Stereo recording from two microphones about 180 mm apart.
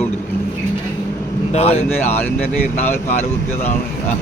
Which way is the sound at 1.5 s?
35° left (ahead or behind).